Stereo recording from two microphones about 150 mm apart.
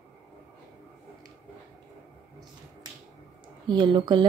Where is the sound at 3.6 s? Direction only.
30° right (ahead or behind).